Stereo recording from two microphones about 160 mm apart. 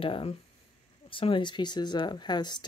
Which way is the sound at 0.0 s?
35° left (ahead or behind).